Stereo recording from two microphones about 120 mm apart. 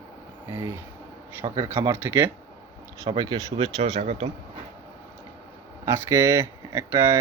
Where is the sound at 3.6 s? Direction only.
65° right (ahead or behind).